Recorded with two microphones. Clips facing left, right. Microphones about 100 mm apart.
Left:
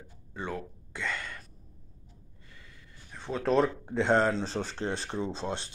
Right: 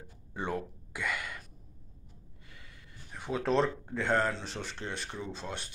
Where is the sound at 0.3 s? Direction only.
15° right (ahead or behind).